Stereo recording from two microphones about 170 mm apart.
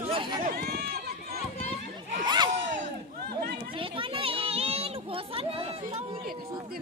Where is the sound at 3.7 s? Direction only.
30° right (ahead or behind).